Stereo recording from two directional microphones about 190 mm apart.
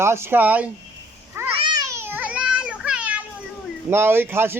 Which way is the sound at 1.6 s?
20° right (ahead or behind).